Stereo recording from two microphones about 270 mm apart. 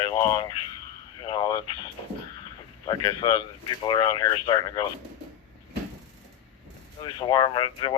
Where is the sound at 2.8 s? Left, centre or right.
Centre.